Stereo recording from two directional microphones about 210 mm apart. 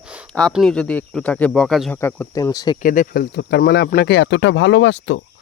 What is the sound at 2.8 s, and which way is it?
Speech, 40° left (ahead or behind).